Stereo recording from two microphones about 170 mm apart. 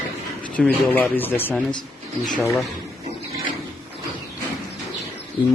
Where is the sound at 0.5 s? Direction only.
10° left (ahead or behind).